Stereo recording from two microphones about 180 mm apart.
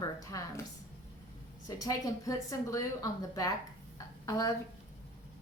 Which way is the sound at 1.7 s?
20° left (ahead or behind).